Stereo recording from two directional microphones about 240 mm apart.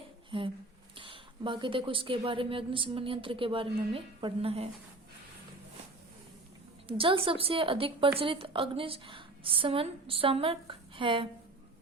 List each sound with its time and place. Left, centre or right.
0.3 s speech: right
6.8 s speech: right